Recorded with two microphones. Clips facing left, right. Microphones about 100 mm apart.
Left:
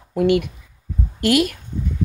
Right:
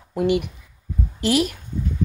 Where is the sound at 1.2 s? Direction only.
55° left (ahead or behind).